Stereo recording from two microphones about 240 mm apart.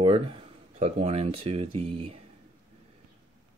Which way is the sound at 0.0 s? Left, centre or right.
Right.